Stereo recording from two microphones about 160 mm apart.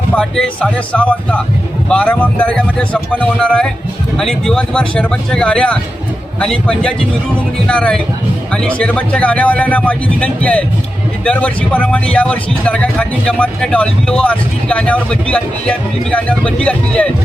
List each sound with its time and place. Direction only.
0.1 s speech: 5° left (ahead or behind)